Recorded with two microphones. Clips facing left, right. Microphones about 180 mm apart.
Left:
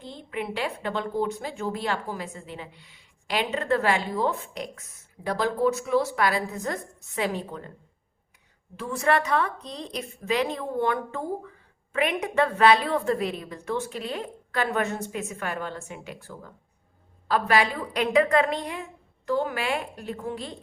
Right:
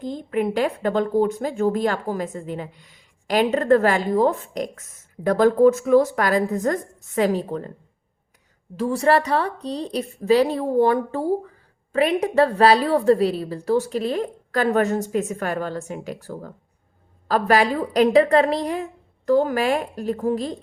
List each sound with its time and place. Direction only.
0.0 s a woman's voice: 45° right (ahead or behind)
8.7 s a woman's voice: 35° right (ahead or behind)